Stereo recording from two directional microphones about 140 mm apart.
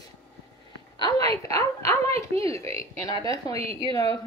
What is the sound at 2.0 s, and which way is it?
Speech, 45° right (ahead or behind).